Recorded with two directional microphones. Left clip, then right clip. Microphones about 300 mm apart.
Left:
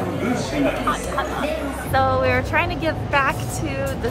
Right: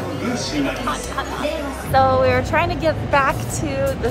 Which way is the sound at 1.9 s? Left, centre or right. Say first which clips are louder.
Right 4 dB; centre.